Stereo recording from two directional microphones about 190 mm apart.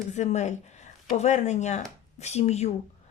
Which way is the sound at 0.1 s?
35° left (ahead or behind).